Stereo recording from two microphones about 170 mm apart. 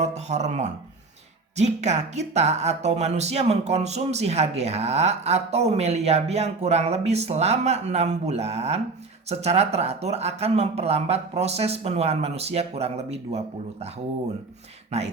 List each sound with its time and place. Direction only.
0.0 s speech: 40° right (ahead or behind)
14.9 s speech: 40° right (ahead or behind)